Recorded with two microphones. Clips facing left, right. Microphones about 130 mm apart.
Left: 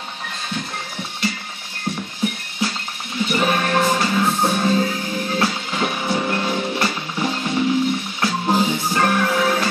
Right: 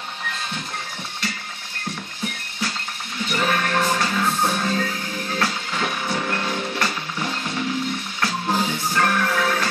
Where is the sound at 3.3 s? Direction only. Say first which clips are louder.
Left 2 dB; 20° left (ahead or behind).